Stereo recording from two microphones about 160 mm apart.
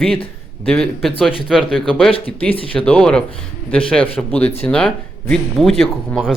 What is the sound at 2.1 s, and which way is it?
Speech, 35° left (ahead or behind).